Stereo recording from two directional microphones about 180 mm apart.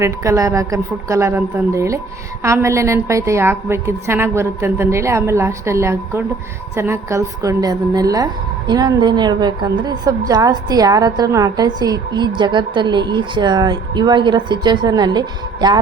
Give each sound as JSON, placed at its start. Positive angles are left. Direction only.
{"t": 0.0, "sound": "a woman's voice", "side_deg": -15}